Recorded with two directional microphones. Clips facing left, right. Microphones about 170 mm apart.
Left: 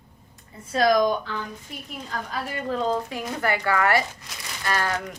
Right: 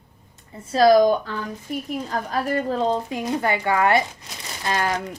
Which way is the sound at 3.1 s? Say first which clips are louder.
Right 3 dB; 20° right (ahead or behind).